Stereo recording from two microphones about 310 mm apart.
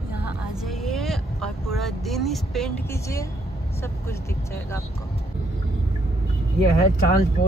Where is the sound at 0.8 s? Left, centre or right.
Centre.